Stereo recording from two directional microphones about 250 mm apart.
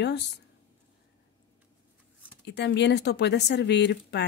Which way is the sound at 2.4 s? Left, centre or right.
Left.